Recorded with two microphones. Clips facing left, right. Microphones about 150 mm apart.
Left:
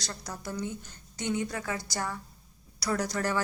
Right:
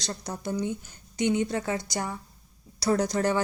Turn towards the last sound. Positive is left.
turn(degrees=-20)  # may be behind; listen again after turning